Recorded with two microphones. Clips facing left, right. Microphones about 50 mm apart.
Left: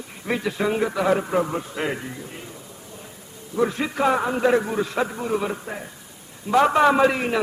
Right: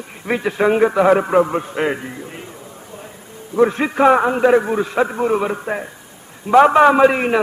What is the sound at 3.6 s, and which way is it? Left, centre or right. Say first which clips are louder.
A man's voice: right 7 dB; right.